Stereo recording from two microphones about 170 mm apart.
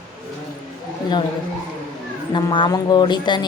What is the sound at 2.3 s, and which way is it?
Speech, 30° left (ahead or behind).